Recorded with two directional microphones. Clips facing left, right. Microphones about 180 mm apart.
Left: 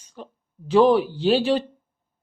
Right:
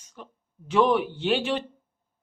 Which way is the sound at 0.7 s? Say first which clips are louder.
Left 5 dB; 35° left (ahead or behind).